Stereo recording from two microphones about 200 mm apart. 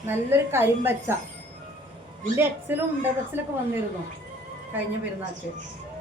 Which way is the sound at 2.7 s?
10° right (ahead or behind).